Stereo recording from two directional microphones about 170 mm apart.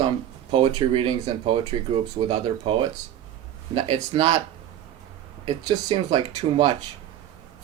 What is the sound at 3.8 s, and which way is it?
Speech, 30° right (ahead or behind).